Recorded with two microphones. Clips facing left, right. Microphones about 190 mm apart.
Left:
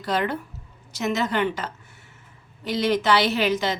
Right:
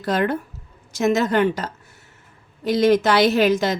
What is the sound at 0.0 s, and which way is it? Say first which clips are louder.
Speech: right 4 dB; 45° right (ahead or behind).